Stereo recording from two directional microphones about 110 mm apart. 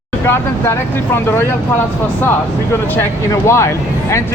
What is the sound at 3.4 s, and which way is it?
Speech, 25° left (ahead or behind).